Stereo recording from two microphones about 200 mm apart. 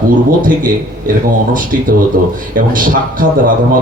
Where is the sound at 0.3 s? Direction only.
45° right (ahead or behind).